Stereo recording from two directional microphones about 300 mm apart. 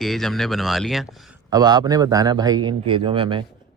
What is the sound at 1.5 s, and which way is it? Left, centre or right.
A man's voice, centre.